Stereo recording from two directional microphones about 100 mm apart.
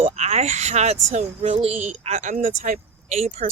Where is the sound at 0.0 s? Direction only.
90° right.